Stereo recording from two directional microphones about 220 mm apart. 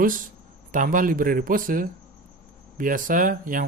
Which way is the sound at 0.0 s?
40° right (ahead or behind).